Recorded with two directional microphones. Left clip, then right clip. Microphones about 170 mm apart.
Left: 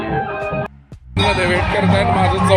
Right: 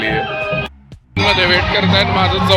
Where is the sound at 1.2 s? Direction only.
10° left (ahead or behind).